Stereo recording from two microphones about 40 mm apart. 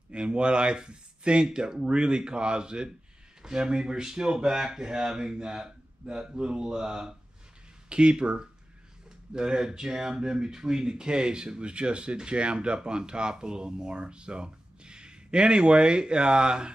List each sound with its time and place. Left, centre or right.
0.1 s speech: right